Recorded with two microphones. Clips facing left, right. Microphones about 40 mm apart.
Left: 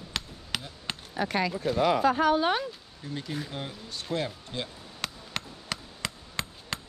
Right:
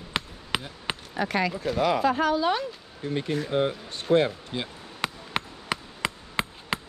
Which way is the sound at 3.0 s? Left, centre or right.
Right.